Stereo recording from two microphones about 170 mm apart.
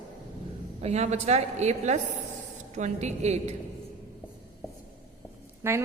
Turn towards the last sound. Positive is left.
turn(degrees=-15)  # may be behind; listen again after turning